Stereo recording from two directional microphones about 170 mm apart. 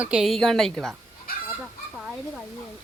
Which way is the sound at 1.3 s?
60° left (ahead or behind).